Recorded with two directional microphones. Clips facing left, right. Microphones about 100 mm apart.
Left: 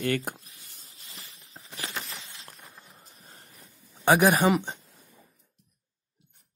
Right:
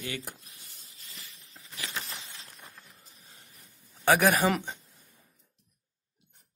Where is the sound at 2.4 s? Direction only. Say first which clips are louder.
Left 1 dB; centre (ahead or behind).